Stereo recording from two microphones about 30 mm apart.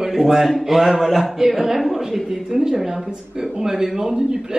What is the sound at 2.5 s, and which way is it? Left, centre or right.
A man's voice, centre.